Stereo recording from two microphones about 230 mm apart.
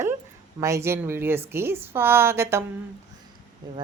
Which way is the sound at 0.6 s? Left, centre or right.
Centre.